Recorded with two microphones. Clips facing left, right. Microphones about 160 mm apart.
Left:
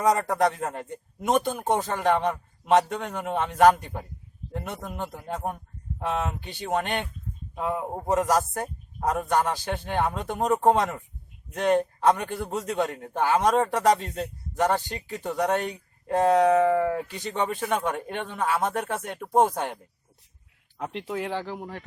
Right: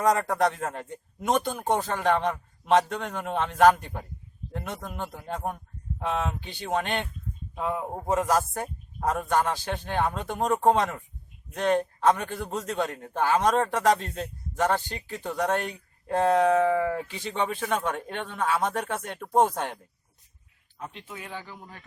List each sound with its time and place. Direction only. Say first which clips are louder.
0.0 s a man's voice: left 1 dB; 5° left (ahead or behind)
20.7 s speech: left 9 dB; 75° left (ahead or behind)